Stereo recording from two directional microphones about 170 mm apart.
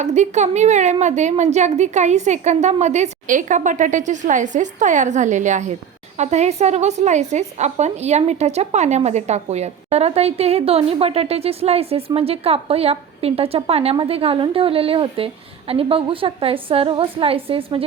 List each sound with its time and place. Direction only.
0.0 s a woman's voice: 45° right (ahead or behind)